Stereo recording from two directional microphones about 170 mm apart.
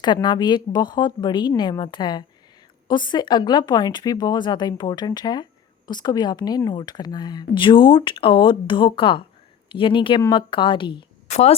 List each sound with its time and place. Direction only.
0.0 s speech: 25° left (ahead or behind)
11.3 s speech: 40° left (ahead or behind)